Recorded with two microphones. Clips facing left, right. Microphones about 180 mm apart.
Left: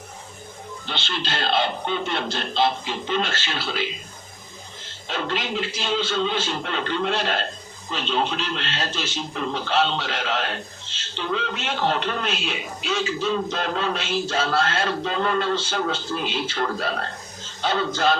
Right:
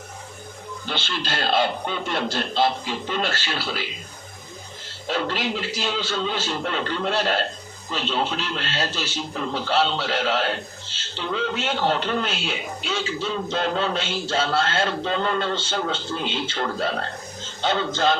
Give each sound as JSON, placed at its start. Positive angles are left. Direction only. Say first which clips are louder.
{"t": 0.9, "sound": "speech", "louder": "right 1 dB", "side_deg": -50}
{"t": 5.0, "sound": "a man's voice", "louder": "right 2 dB", "side_deg": -40}